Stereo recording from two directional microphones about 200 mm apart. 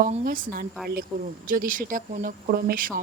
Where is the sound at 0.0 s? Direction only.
45° right (ahead or behind).